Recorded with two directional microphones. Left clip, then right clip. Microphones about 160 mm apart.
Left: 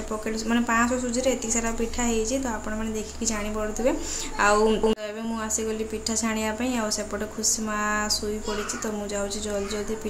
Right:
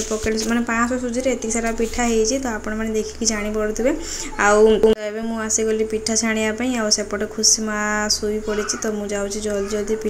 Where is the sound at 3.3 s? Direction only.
15° right (ahead or behind).